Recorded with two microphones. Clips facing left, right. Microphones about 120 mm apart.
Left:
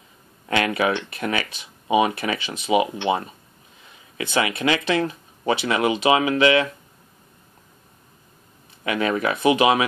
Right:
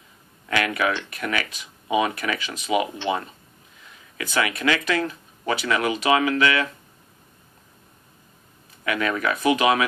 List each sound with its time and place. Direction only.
0.5 s speech: 25° left (ahead or behind)
8.8 s speech: 25° left (ahead or behind)